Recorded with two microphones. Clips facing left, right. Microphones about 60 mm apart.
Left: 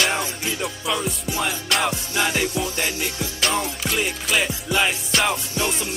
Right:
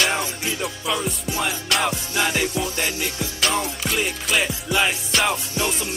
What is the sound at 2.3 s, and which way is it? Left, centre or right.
Music, right.